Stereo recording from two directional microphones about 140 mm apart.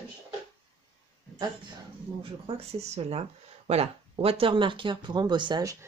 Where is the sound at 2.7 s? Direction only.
50° right (ahead or behind); by 5.7 s 30° right (ahead or behind).